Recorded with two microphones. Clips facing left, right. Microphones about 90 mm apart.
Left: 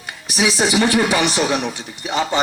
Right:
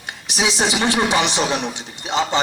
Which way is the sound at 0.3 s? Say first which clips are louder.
Left 2 dB; 20° right (ahead or behind).